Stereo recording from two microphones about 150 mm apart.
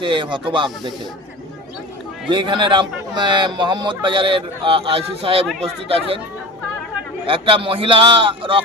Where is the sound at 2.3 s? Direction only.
30° right (ahead or behind).